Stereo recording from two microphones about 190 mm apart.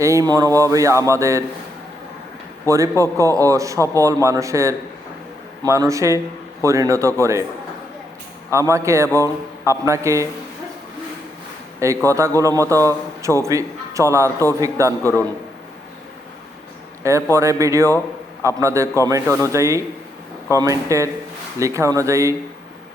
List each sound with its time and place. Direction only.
0.0 s a man's voice: 15° right (ahead or behind)
2.6 s a man's voice: 15° right (ahead or behind)
8.7 s a man's voice: 15° right (ahead or behind)
12.0 s a man's voice: 15° right (ahead or behind)
15.0 s a man's voice: 10° left (ahead or behind)
17.0 s a man's voice: 15° right (ahead or behind)